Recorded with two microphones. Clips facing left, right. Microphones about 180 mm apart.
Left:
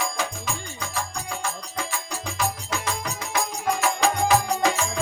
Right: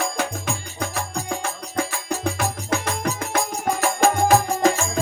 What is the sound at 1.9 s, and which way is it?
Music, 55° right (ahead or behind).